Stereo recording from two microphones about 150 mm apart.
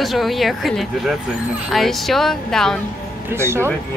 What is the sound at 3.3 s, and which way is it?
Speech, 15° right (ahead or behind).